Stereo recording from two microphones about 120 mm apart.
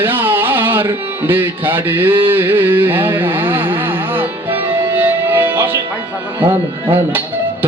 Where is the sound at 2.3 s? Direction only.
15° right (ahead or behind).